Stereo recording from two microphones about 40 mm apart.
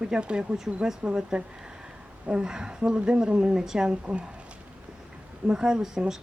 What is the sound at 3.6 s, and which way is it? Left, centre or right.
Speech, centre.